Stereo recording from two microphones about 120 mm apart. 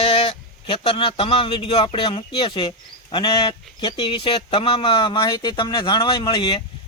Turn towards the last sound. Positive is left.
turn(degrees=40)  # may be behind; listen again after turning